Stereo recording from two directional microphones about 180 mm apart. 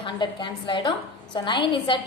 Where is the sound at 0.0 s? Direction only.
25° left (ahead or behind).